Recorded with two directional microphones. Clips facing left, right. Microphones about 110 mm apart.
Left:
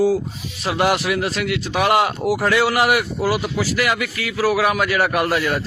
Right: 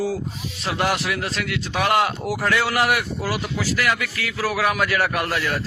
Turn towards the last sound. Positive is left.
turn(degrees=15)  # may be behind; listen again after turning